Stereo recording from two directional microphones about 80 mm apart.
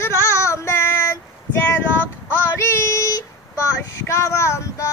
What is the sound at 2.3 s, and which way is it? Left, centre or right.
Child singing, left.